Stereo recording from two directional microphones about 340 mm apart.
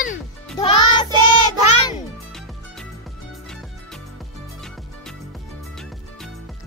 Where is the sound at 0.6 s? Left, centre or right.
Centre.